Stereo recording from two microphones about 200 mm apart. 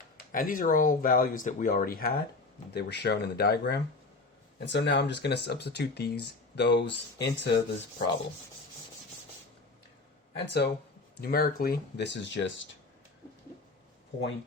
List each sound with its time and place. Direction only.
0.3 s speech: 45° left (ahead or behind)
2.7 s speech: 55° left (ahead or behind)
10.3 s speech: 55° left (ahead or behind)